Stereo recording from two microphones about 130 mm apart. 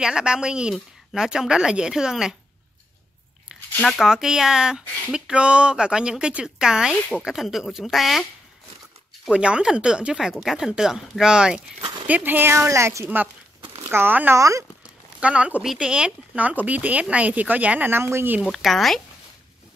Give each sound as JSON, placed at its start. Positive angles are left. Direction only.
{"t": 0.0, "sound": "speech", "side_deg": -5}
{"t": 3.8, "sound": "speech", "side_deg": -5}
{"t": 15.1, "sound": "speech", "side_deg": -10}
{"t": 18.4, "sound": "speech", "side_deg": 0}